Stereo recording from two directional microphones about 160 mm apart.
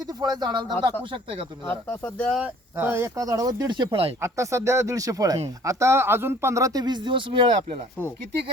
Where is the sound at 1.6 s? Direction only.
10° left (ahead or behind).